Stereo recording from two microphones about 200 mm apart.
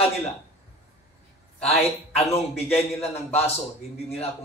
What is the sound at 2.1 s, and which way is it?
A man's voice, 30° left (ahead or behind).